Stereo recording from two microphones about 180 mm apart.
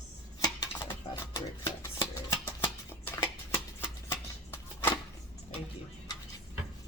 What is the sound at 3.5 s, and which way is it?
Shuffling cards, 15° left (ahead or behind).